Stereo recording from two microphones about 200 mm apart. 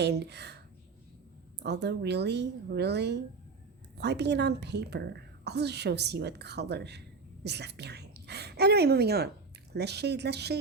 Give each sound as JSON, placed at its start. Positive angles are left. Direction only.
{"t": 0.0, "sound": "a woman's voice", "side_deg": -55}
{"t": 1.6, "sound": "a woman's voice", "side_deg": -60}